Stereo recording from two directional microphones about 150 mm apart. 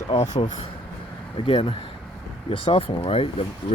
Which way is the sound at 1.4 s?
35° left (ahead or behind).